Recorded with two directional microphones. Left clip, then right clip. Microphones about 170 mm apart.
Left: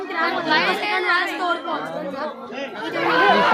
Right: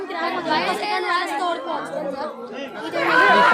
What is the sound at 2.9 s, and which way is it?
Speech, 20° right (ahead or behind).